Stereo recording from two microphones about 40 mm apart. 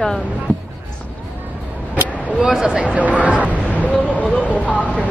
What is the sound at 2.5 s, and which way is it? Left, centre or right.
Speech, centre.